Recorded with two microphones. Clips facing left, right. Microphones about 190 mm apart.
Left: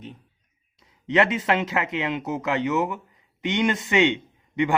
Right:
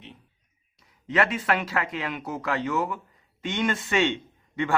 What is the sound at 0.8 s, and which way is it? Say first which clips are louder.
Speech: left 4 dB; 25° left (ahead or behind).